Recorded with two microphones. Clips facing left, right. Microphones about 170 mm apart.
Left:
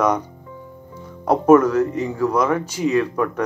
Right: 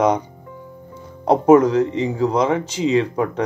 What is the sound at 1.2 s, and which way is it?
Speech, 15° right (ahead or behind).